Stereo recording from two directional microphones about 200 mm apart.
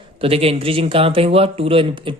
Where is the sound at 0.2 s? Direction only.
30° right (ahead or behind).